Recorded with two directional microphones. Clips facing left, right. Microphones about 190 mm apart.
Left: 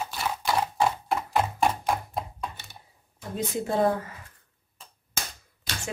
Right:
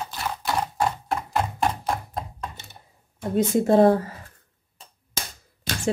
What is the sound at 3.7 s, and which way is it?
Speech, 40° right (ahead or behind).